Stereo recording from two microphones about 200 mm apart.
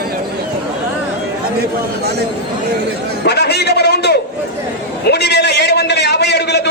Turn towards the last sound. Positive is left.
turn(degrees=55)  # may be behind; listen again after turning